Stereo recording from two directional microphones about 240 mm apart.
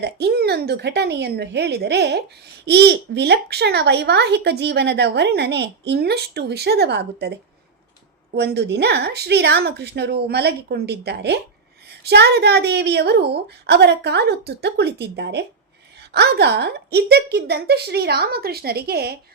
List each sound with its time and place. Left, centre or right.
0.0 s a child's voice: right
8.4 s a child's voice: right